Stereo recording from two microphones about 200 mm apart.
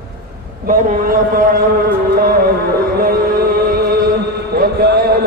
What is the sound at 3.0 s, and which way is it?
Music, 50° right (ahead or behind).